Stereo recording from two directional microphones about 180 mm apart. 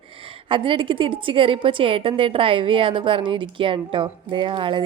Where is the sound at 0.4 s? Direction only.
30° right (ahead or behind).